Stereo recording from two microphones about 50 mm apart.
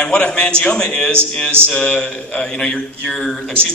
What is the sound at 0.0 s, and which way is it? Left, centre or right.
A man's voice, centre.